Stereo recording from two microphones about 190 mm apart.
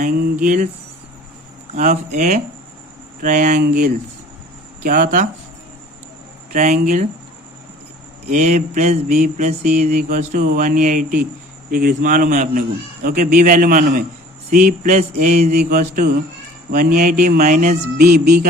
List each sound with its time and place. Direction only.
0.4 s speech: 45° right (ahead or behind)
1.7 s mantra: 40° right (ahead or behind)
3.2 s speech: 45° right (ahead or behind)
6.5 s speech: 45° right (ahead or behind)
8.3 s mantra: 40° right (ahead or behind)
11.7 s speech: 50° right (ahead or behind)